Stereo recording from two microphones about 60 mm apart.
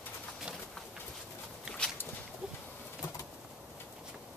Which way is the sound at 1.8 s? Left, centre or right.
Centre.